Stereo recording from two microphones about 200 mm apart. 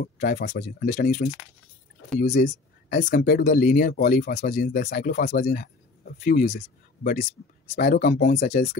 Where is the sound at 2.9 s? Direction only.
55° left (ahead or behind).